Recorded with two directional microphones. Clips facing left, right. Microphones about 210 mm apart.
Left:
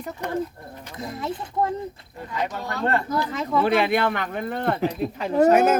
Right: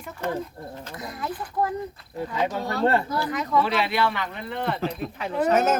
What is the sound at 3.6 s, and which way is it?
Speech, 50° left (ahead or behind).